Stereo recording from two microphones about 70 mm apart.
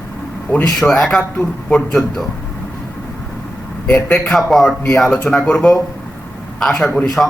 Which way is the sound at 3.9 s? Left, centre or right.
Centre.